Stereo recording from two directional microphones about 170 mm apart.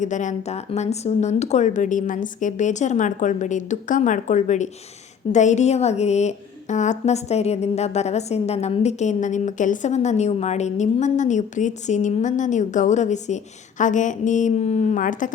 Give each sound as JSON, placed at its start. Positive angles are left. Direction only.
{"t": 0.0, "sound": "a woman's voice", "side_deg": 45}